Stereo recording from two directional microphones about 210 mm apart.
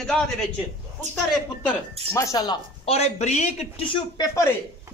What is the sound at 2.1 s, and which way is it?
Speech, 15° left (ahead or behind).